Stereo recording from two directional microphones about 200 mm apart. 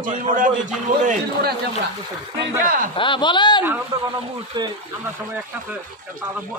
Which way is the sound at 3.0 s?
25° left (ahead or behind).